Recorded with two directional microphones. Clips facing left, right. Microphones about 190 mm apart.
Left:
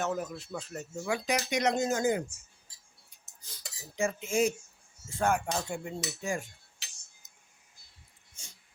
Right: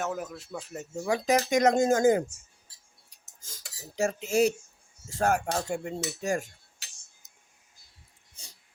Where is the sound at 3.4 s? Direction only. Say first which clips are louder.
Right 2 dB; 45° right (ahead or behind).